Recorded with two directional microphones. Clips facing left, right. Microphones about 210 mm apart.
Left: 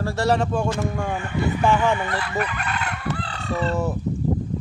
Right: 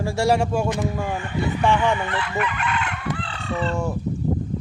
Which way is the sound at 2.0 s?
40° left (ahead or behind).